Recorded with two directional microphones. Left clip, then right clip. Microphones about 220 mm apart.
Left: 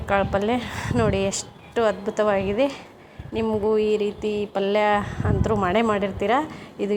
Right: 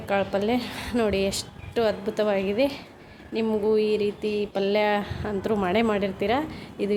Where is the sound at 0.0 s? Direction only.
Centre (ahead or behind).